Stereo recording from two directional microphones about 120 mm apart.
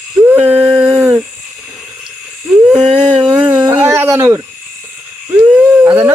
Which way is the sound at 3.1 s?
10° right (ahead or behind).